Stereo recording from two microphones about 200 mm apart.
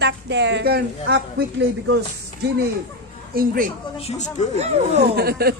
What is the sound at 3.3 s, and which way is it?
Speech, 45° right (ahead or behind).